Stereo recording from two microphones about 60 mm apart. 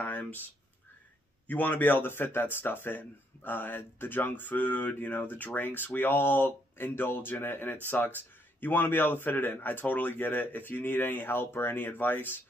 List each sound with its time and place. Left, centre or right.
0.0 s speech: left
1.5 s speech: left